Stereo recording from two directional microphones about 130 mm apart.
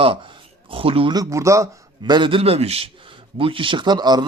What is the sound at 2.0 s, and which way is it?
A man's voice, 35° right (ahead or behind).